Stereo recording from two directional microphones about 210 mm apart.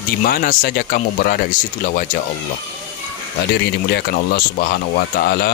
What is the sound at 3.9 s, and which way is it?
Speech, 50° left (ahead or behind).